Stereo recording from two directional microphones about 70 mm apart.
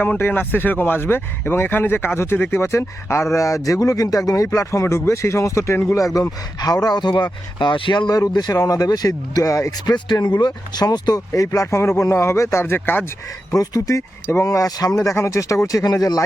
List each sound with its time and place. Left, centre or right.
0.0 s speech: left
4.5 s speech: left
6.6 s speech: left
9.8 s speech: left
11.3 s speech: left
13.5 s speech: left